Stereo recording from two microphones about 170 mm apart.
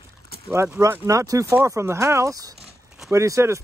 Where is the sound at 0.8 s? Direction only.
20° right (ahead or behind).